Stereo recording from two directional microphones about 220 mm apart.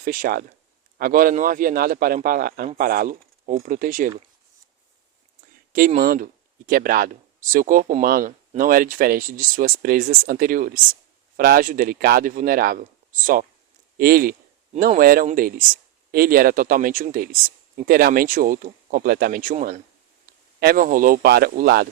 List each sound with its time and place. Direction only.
0.0 s speech: 40° right (ahead or behind)
5.7 s a man's voice: 40° right (ahead or behind)